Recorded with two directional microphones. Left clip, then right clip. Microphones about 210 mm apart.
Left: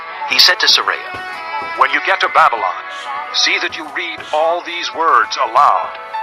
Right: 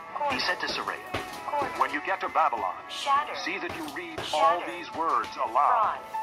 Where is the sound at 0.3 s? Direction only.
35° left (ahead or behind).